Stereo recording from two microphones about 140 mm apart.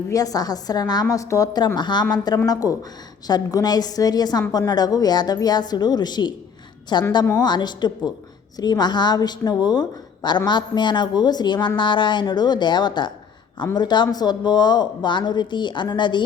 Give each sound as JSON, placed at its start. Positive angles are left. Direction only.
{"t": 0.1, "sound": "a woman's voice", "side_deg": 25}